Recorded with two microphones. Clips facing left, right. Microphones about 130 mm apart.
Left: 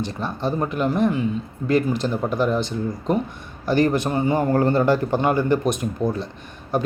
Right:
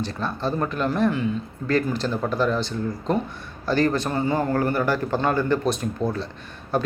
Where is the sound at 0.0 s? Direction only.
20° left (ahead or behind).